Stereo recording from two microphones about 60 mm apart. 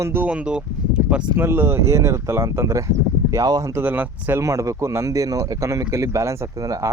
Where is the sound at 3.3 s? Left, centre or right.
Right.